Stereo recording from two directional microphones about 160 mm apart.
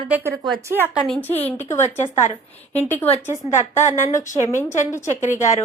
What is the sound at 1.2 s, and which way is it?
Speech, 10° left (ahead or behind).